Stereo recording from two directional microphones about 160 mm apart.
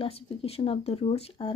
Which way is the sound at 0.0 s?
40° left (ahead or behind).